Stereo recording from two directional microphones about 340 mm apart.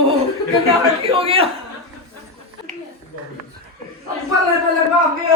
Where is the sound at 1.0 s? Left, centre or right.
Centre.